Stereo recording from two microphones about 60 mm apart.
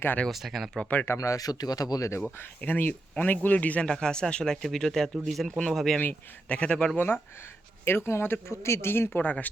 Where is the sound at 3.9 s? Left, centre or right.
Centre.